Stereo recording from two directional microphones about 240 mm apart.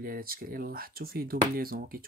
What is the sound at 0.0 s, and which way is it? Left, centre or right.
Speech, right.